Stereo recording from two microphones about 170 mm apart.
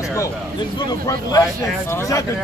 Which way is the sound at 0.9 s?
20° left (ahead or behind).